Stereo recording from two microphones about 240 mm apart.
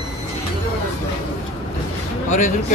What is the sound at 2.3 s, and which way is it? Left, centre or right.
Speech, left.